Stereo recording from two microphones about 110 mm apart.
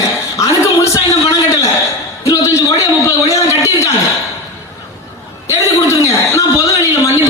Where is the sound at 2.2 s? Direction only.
30° left (ahead or behind).